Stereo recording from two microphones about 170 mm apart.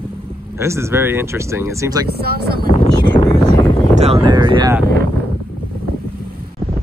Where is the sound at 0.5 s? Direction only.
15° right (ahead or behind).